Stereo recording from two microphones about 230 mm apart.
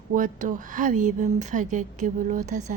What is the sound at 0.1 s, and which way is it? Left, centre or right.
Speech, right.